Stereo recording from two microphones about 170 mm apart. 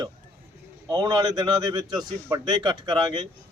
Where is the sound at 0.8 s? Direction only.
25° right (ahead or behind).